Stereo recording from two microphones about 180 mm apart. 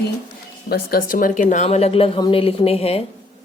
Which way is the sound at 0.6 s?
60° left (ahead or behind).